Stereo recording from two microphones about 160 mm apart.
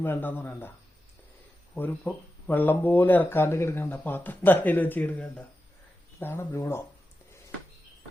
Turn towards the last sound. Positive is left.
turn(degrees=15)  # may be behind; listen again after turning